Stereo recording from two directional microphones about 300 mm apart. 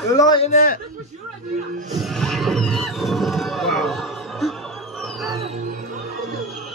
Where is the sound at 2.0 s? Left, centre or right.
Centre.